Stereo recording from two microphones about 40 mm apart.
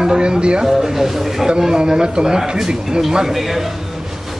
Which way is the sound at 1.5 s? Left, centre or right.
Centre.